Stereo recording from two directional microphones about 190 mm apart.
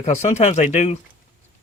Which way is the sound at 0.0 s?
35° left (ahead or behind).